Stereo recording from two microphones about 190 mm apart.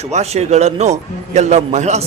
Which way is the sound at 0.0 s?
35° right (ahead or behind).